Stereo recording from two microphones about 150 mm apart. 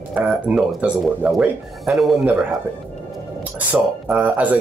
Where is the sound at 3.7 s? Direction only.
10° right (ahead or behind).